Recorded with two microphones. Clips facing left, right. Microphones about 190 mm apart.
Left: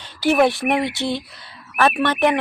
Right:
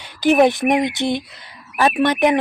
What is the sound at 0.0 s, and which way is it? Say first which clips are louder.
Speech: right 3 dB; 15° right (ahead or behind).